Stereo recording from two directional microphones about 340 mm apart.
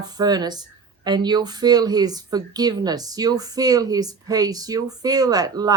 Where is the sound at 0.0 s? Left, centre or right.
Centre.